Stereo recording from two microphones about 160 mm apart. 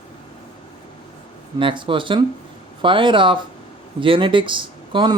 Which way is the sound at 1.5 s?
30° right (ahead or behind).